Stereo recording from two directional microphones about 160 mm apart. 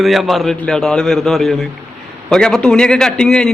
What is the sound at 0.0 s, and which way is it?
A man's voice, centre (ahead or behind).